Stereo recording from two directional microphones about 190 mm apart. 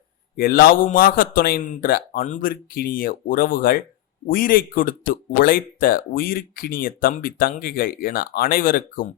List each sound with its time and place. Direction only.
0.3 s speech: 50° left (ahead or behind)